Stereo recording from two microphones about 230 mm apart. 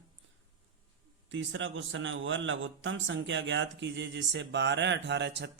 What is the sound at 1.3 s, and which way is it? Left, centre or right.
A man's voice, right.